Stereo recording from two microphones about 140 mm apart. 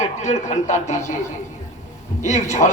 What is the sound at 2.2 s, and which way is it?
Speech, 60° left (ahead or behind).